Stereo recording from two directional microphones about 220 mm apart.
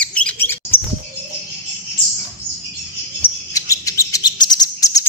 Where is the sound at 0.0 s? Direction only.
5° left (ahead or behind).